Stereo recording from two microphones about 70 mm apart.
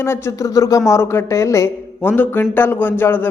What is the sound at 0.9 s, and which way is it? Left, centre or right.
Speech, left.